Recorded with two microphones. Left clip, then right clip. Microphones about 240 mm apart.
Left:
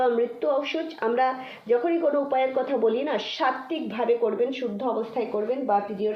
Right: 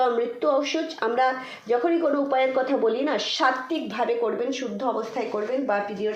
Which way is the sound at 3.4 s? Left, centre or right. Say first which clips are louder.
Right 3 dB; right.